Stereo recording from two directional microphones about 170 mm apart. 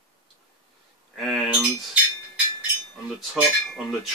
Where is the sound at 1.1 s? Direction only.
Centre (ahead or behind).